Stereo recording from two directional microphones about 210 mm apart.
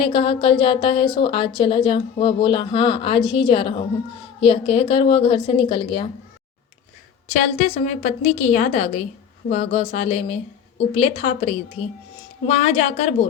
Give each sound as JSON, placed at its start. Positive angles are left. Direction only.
{"t": 0.0, "sound": "a woman's voice", "side_deg": 25}
{"t": 7.3, "sound": "a woman's voice", "side_deg": 35}